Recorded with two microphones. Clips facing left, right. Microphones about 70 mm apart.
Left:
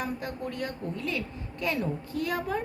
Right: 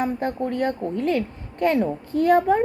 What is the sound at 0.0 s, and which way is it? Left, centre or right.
A woman's voice, right.